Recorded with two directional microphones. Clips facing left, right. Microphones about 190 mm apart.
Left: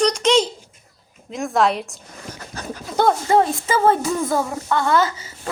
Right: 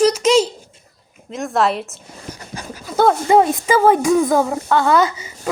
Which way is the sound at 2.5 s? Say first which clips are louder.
Left 3 dB; 15° right (ahead or behind).